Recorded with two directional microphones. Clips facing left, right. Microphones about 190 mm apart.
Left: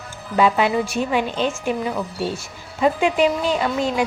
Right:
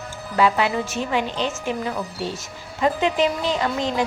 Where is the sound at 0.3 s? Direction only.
20° left (ahead or behind).